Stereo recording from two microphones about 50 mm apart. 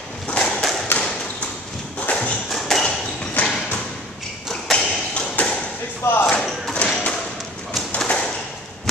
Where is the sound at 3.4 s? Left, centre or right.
Left.